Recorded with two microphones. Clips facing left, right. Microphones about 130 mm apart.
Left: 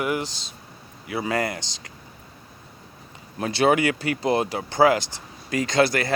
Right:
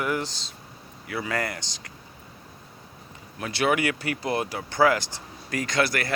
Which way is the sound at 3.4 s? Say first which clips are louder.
Left 5 dB; 30° left (ahead or behind).